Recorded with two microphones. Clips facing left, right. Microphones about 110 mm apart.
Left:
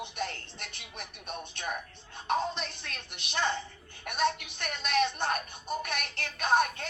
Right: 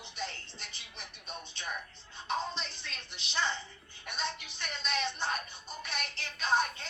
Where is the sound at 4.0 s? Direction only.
60° left (ahead or behind).